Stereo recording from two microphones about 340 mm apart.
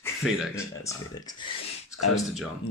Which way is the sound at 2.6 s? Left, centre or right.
Centre.